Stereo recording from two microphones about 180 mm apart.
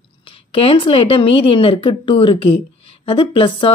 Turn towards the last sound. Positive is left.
turn(degrees=30)  # may be behind; listen again after turning